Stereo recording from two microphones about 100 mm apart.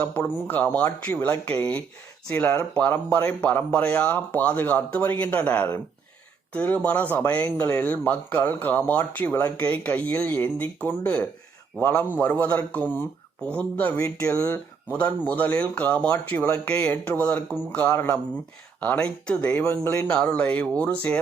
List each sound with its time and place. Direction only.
0.0 s speech: 10° left (ahead or behind)
14.0 s speech: 30° left (ahead or behind)
14.9 s speech: 15° left (ahead or behind)